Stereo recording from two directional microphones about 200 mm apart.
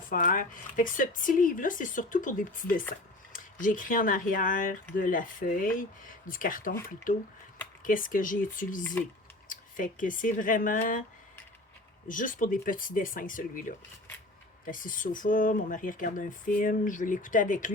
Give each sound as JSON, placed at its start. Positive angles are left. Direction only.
{"t": 0.1, "sound": "speech", "side_deg": 45}
{"t": 7.8, "sound": "speech", "side_deg": 45}
{"t": 12.0, "sound": "speech", "side_deg": 40}